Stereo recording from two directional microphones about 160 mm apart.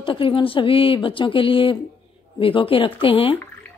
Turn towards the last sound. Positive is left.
turn(degrees=35)  # may be behind; listen again after turning